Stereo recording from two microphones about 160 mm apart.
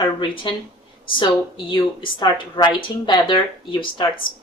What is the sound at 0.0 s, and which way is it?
A woman's voice, 30° left (ahead or behind).